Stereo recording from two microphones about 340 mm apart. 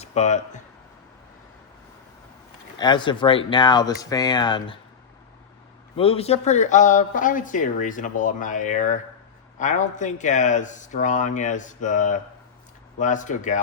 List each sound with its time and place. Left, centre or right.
0.0 s a man's voice: centre
2.7 s speech: centre
6.0 s speech: centre